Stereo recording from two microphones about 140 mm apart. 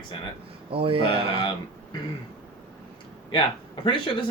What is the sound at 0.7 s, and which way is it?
Speech, 40° right (ahead or behind).